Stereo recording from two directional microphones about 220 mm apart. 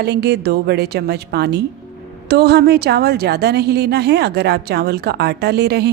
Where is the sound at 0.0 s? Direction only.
50° right (ahead or behind).